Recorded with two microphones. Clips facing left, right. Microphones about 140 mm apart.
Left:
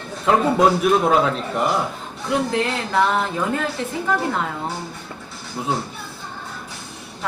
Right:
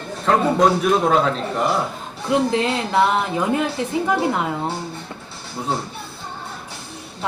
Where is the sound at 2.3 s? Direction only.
20° right (ahead or behind).